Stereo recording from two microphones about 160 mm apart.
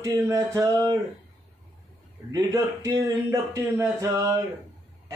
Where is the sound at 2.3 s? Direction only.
20° right (ahead or behind).